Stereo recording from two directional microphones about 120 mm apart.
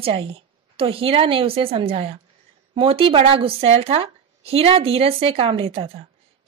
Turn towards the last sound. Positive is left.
turn(degrees=-55)  # may be behind; listen again after turning